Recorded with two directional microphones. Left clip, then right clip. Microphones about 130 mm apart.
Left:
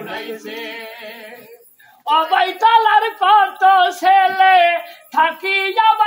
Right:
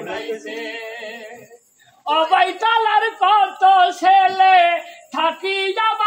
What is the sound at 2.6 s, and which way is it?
Speech, 45° left (ahead or behind).